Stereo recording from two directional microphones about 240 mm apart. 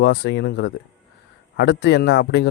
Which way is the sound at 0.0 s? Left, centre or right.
Left.